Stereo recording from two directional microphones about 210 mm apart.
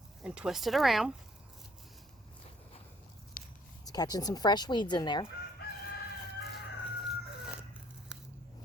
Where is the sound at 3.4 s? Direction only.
40° left (ahead or behind).